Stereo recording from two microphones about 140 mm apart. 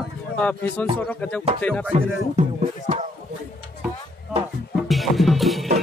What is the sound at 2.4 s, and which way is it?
Music, 55° right (ahead or behind).